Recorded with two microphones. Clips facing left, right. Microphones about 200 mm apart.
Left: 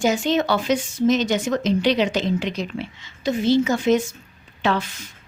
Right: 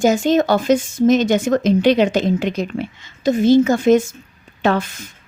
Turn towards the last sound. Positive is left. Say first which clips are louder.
# right 5 dB
turn(degrees=-50)  # may be behind; listen again after turning